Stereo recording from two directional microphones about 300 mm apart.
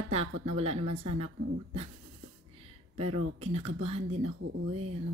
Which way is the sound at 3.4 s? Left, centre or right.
Centre.